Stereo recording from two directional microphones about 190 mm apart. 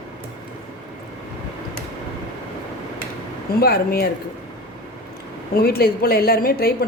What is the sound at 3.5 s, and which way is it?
Speech, 55° left (ahead or behind).